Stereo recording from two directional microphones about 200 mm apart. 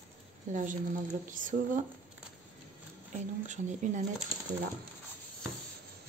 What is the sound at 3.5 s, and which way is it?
Speech, 35° right (ahead or behind).